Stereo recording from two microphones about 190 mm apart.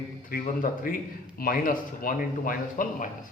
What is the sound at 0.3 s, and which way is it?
A man's voice, 50° left (ahead or behind).